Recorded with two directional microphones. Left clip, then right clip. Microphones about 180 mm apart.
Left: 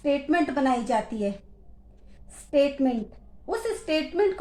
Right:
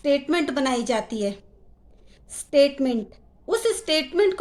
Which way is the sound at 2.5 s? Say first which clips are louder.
Right 4 dB; 40° right (ahead or behind).